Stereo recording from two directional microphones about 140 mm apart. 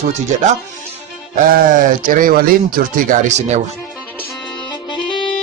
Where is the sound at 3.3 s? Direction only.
55° right (ahead or behind).